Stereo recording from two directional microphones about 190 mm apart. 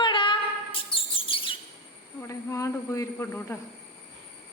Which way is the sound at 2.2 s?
15° left (ahead or behind).